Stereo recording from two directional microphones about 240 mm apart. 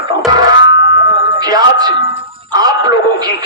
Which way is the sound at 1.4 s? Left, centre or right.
Centre.